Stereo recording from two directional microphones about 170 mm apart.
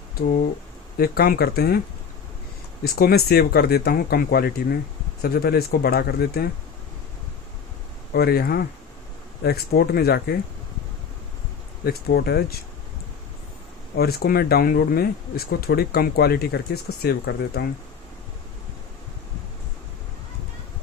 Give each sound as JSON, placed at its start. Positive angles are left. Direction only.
{"t": 0.9, "sound": "speech", "side_deg": 65}
{"t": 2.8, "sound": "speech", "side_deg": 65}
{"t": 8.1, "sound": "speech", "side_deg": 65}
{"t": 11.9, "sound": "speech", "side_deg": 70}
{"t": 13.9, "sound": "speech", "side_deg": 65}